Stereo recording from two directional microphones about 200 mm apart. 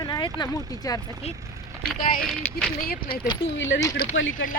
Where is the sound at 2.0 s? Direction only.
45° left (ahead or behind).